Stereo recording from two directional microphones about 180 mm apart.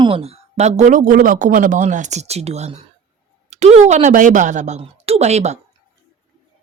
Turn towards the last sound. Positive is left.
turn(degrees=-40)  # may be behind; listen again after turning